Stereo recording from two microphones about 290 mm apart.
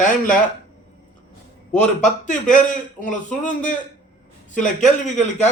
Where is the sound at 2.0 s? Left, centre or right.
Left.